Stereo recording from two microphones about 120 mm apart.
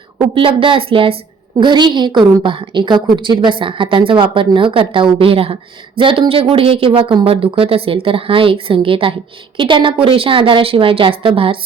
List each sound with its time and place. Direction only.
0.3 s a woman's voice: 45° right (ahead or behind)
1.5 s a woman's voice: 40° right (ahead or behind)